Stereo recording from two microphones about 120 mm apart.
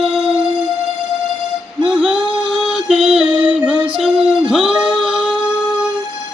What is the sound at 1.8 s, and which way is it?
Music, 10° right (ahead or behind).